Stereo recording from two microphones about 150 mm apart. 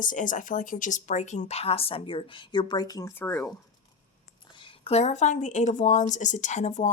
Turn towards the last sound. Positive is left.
turn(degrees=50)  # may be behind; listen again after turning